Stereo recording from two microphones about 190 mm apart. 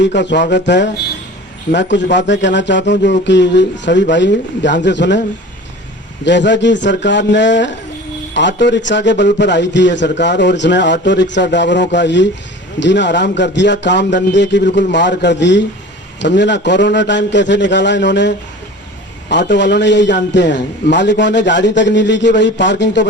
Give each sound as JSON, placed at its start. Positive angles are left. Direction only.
{"t": 0.0, "sound": "a man's voice", "side_deg": 65}
{"t": 6.2, "sound": "a man's voice", "side_deg": 70}